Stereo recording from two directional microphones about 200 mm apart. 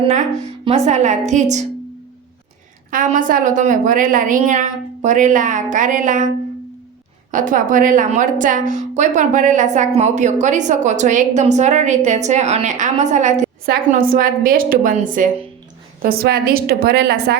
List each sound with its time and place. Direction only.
0.6 s a woman's voice: 35° right (ahead or behind)
2.9 s a woman's voice: 40° right (ahead or behind)
7.3 s a woman's voice: 40° right (ahead or behind)